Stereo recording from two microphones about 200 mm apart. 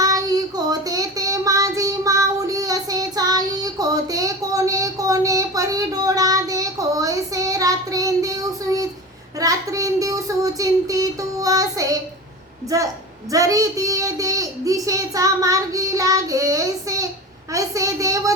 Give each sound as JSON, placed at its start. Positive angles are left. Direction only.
{"t": 0.0, "sound": "child singing", "side_deg": -20}
{"t": 9.4, "sound": "a child's voice", "side_deg": -15}
{"t": 17.5, "sound": "a sound", "side_deg": -15}